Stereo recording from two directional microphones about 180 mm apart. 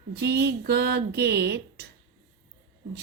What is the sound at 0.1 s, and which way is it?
A woman's voice, 65° right (ahead or behind).